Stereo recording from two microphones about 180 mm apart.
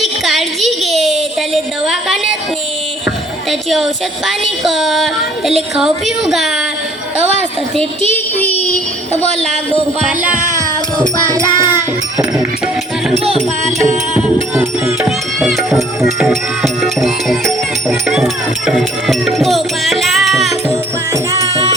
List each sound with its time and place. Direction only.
0.0 s a sound: centre (ahead or behind)
4.3 s child singing: centre (ahead or behind)
7.8 s child singing: 10° left (ahead or behind)
10.3 s child singing: 45° right (ahead or behind)
11.3 s music: 10° right (ahead or behind)
13.7 s music: 40° right (ahead or behind)
14.1 s music: 5° right (ahead or behind)
15.4 s speech: centre (ahead or behind)
21.3 s music: 20° left (ahead or behind)